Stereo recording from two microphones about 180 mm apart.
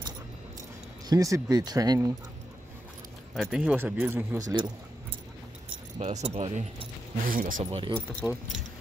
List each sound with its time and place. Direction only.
1.0 s speech: 20° right (ahead or behind)
3.3 s speech: centre (ahead or behind); by 4.7 s 20° right (ahead or behind)
5.9 s speech: 40° right (ahead or behind)
7.7 s speech: 30° right (ahead or behind)